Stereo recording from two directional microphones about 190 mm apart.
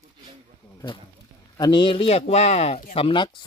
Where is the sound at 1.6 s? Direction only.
25° left (ahead or behind).